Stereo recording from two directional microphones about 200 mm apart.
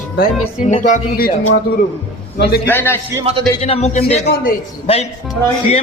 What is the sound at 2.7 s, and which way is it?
Speech, 10° left (ahead or behind).